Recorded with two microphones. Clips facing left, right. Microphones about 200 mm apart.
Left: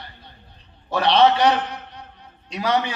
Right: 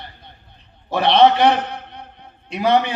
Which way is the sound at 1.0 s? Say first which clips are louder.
Right 3 dB; 60° right (ahead or behind).